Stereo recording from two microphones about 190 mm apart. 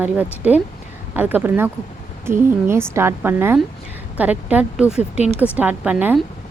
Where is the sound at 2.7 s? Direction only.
15° right (ahead or behind).